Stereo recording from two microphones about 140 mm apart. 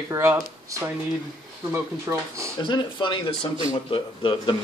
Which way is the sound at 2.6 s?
35° left (ahead or behind).